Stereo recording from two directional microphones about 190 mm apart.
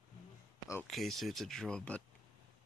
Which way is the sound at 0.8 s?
Centre (ahead or behind).